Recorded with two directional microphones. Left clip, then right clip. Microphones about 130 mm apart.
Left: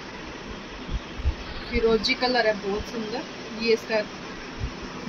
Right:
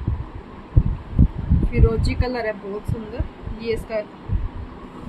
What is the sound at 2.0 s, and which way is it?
Speech, 30° right (ahead or behind).